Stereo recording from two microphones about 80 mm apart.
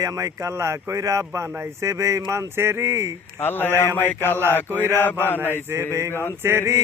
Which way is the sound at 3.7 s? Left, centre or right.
Right.